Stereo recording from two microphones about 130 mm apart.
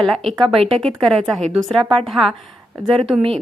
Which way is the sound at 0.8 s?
Centre (ahead or behind).